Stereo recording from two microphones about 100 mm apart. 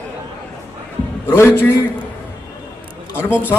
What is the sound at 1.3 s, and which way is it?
Speech, 25° left (ahead or behind).